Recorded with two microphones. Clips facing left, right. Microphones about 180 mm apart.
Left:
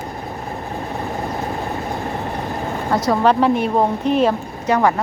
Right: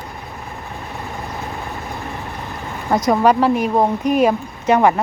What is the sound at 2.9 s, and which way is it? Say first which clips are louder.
Speech: right 2 dB; 15° right (ahead or behind).